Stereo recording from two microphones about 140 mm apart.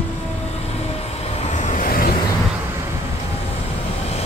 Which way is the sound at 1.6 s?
70° left (ahead or behind).